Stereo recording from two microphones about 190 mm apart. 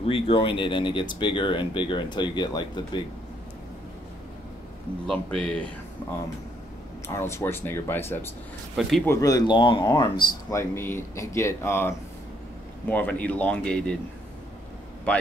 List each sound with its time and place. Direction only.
0.0 s speech: 30° left (ahead or behind)
5.0 s speech: 5° left (ahead or behind)
7.1 s speech: 15° left (ahead or behind)
12.9 s speech: 5° left (ahead or behind)
15.1 s a man's voice: 5° left (ahead or behind)